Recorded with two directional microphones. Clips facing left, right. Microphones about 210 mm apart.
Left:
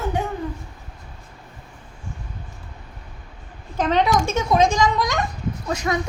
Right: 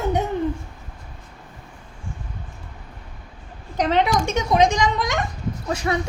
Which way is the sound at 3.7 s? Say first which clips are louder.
Even; 20° right (ahead or behind).